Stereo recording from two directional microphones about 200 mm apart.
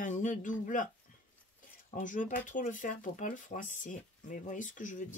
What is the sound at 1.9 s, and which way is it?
Speech, 40° left (ahead or behind).